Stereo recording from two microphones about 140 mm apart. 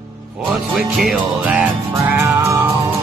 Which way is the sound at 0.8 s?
5° right (ahead or behind).